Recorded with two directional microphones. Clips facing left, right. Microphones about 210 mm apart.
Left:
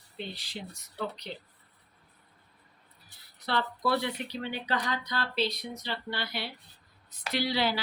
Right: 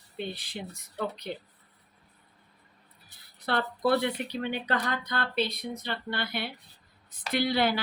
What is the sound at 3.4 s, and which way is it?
A woman's voice, 55° right (ahead or behind).